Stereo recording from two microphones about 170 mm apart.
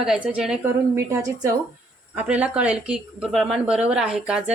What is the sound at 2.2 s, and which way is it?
Speech, 5° right (ahead or behind).